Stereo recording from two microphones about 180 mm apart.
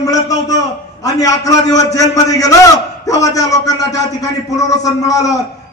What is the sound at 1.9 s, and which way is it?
A man's voice, 20° left (ahead or behind).